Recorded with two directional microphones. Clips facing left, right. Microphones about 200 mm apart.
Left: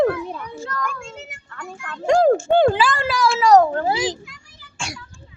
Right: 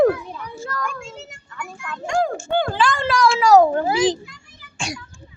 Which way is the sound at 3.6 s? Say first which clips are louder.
Right 2 dB; 15° right (ahead or behind).